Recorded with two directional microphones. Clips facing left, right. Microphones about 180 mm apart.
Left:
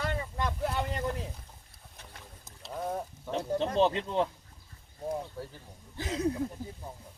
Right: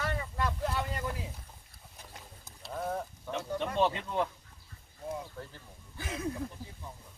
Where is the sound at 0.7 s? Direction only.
20° left (ahead or behind).